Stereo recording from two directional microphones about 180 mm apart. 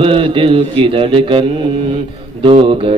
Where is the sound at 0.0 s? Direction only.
30° right (ahead or behind).